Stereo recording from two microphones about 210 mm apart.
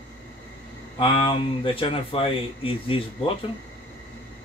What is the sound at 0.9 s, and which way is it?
Speech, 25° left (ahead or behind).